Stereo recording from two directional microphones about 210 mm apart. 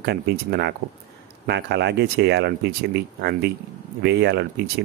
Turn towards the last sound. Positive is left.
turn(degrees=-50)  # may be behind; listen again after turning